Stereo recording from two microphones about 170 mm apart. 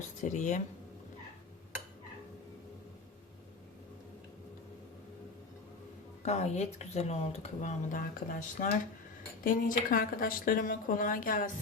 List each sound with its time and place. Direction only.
0.2 s speech: 45° left (ahead or behind)
6.2 s speech: 40° left (ahead or behind)